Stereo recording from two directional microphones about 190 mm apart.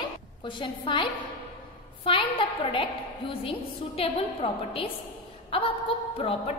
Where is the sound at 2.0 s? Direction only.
25° left (ahead or behind).